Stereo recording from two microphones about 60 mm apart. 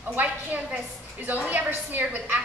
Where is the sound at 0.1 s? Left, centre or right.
Right.